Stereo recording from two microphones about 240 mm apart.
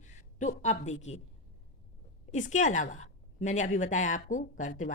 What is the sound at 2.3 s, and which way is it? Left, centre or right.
A woman's voice, left.